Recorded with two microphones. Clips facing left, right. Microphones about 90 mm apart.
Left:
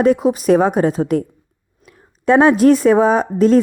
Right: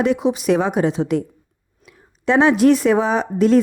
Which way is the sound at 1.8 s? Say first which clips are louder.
Left 4 dB; 45° left (ahead or behind).